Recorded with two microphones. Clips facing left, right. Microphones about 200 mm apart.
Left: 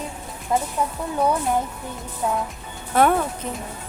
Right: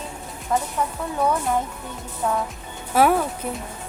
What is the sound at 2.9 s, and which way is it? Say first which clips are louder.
Speech: even; 5° right (ahead or behind).